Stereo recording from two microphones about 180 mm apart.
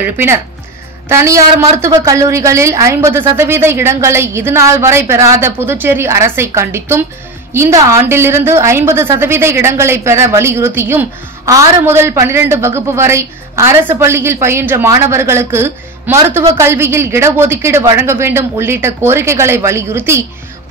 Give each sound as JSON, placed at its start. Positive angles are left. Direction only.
{"t": 0.0, "sound": "a woman's voice", "side_deg": -10}